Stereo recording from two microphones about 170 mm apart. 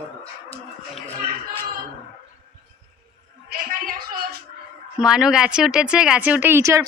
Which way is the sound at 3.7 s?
60° right (ahead or behind).